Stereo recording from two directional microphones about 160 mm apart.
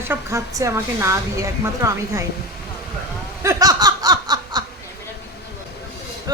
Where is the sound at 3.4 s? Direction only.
20° right (ahead or behind).